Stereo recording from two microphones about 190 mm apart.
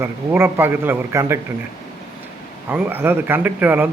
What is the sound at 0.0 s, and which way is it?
A man's voice, 10° right (ahead or behind).